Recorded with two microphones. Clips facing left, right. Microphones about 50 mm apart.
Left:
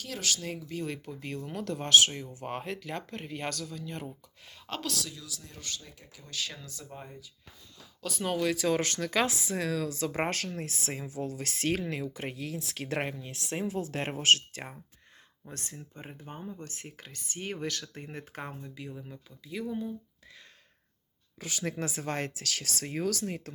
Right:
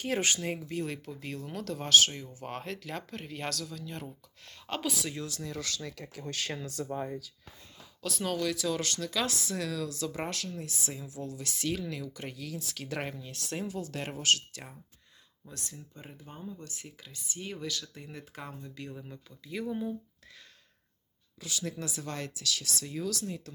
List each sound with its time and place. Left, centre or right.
0.0 s speech: right
0.3 s speech: centre
0.7 s speech: centre
5.4 s speech: right
6.1 s speech: right
6.8 s speech: right
8.0 s speech: centre
8.4 s speech: left
9.2 s speech: centre
9.6 s speech: left
13.9 s speech: left
18.6 s speech: centre
19.7 s speech: centre
21.4 s speech: left